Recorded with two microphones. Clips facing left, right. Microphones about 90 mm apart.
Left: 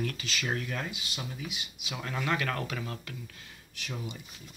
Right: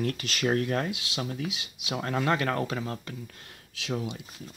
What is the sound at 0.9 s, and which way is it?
Speech, 85° right.